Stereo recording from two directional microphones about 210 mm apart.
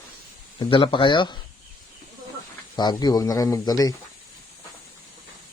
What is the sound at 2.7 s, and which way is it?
Speech, 20° left (ahead or behind).